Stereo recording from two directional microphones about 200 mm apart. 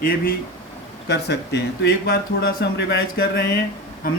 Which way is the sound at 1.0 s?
55° left (ahead or behind).